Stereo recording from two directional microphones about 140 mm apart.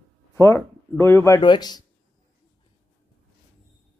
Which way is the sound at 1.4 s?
30° left (ahead or behind).